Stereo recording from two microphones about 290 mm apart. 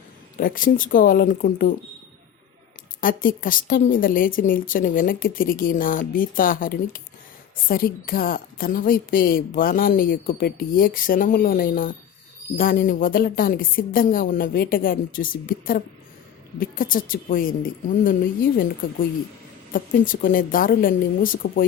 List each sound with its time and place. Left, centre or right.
0.3 s a woman's voice: left
3.0 s a woman's voice: left
19.7 s a woman's voice: left